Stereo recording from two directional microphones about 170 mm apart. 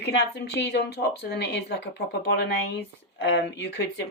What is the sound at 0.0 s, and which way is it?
Speech, 80° left.